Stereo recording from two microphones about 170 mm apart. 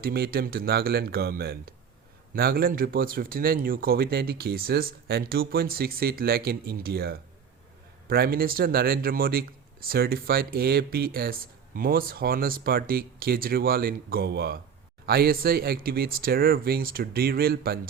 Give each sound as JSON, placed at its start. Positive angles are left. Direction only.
{"t": 0.0, "sound": "speech", "side_deg": -65}